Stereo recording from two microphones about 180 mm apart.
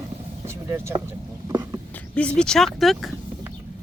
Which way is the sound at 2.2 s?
5° left (ahead or behind).